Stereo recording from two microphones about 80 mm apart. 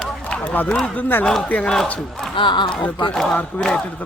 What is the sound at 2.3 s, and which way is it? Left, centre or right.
Speech, left.